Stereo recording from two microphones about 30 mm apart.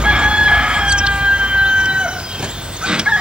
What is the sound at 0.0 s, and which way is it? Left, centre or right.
Crowing, right.